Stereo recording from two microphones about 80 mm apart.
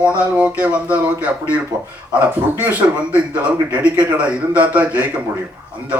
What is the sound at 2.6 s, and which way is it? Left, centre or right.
Speech, centre.